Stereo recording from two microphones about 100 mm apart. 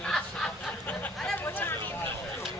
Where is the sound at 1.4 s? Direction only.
20° left (ahead or behind).